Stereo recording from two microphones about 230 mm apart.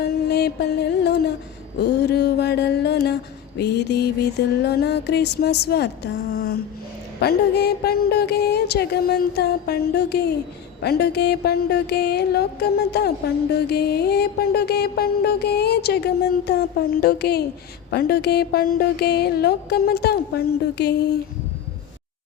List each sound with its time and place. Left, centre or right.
0.0 s music: left
1.8 s a sound: left
3.6 s music: left